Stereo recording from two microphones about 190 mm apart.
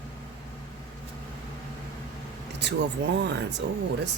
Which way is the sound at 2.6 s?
65° right (ahead or behind).